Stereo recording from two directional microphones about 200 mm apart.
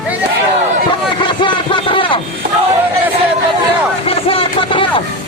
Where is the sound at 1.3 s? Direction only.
25° left (ahead or behind).